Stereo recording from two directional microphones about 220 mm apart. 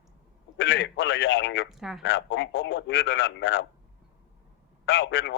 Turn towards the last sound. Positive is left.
turn(degrees=55)  # may be behind; listen again after turning